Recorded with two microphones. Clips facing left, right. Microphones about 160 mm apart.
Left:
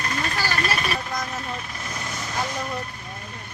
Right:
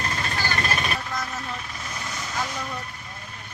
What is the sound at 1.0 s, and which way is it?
Vehicle, 15° left (ahead or behind).